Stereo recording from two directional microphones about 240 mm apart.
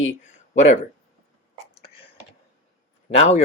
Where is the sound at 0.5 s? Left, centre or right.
Left.